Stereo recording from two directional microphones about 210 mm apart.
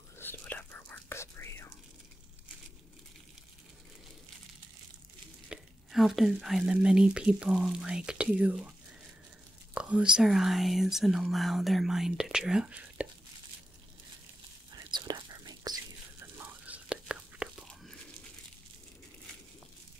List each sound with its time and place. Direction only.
0.2 s whispering: 10° left (ahead or behind)
5.5 s speech: centre (ahead or behind)
9.8 s speech: 5° right (ahead or behind)
14.9 s whispering: 20° right (ahead or behind)
16.3 s whispering: 10° right (ahead or behind)